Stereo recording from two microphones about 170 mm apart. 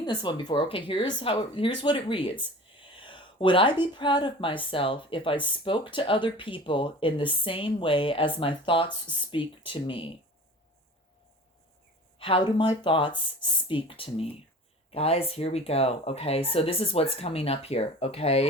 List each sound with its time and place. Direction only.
0.0 s speech: 25° left (ahead or behind)
12.2 s speech: 30° left (ahead or behind)